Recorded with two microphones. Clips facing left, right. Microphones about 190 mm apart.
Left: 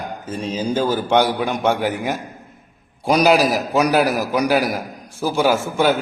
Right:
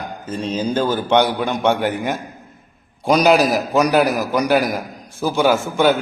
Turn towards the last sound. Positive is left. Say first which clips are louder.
# right 1 dB
turn(degrees=0)  # may be behind; listen again after turning